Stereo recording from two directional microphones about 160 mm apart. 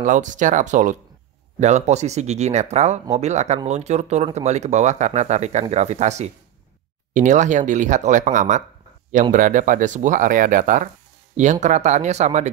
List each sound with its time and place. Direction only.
0.0 s speech: 50° right (ahead or behind)